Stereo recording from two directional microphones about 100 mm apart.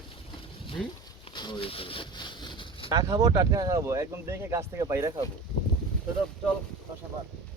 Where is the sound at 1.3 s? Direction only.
50° left (ahead or behind).